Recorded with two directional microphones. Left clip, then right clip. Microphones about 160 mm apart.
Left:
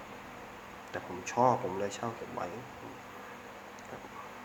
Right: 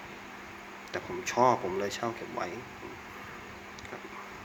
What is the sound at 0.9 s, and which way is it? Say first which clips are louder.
Speech: right 3 dB; 20° right (ahead or behind).